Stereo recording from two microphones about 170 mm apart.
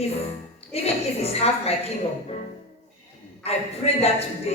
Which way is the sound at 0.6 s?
35° left (ahead or behind).